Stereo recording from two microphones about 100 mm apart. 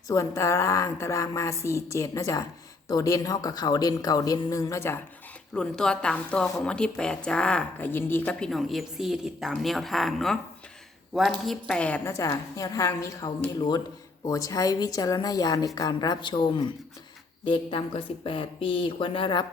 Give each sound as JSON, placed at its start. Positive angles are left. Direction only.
{"t": 0.1, "sound": "a woman's voice", "side_deg": 30}
{"t": 5.5, "sound": "a woman's voice", "side_deg": 5}
{"t": 8.4, "sound": "a woman's voice", "side_deg": 0}
{"t": 11.7, "sound": "a woman's voice", "side_deg": 15}
{"t": 12.0, "sound": "a woman's voice", "side_deg": 30}